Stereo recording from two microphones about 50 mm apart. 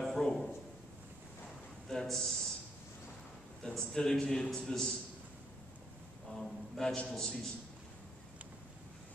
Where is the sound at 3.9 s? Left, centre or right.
Centre.